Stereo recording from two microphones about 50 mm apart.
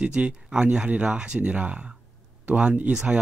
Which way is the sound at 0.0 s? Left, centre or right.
Right.